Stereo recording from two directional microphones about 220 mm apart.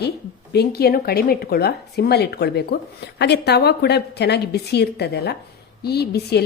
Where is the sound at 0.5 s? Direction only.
45° left (ahead or behind).